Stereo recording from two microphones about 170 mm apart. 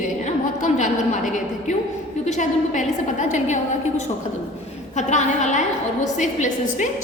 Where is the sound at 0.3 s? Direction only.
45° left (ahead or behind).